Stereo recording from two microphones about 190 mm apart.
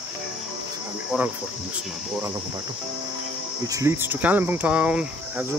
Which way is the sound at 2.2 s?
15° right (ahead or behind).